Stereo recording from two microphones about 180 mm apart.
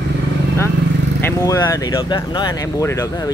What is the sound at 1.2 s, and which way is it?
Speech, 20° left (ahead or behind).